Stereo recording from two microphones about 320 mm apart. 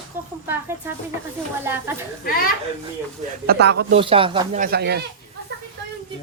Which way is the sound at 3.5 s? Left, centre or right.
Right.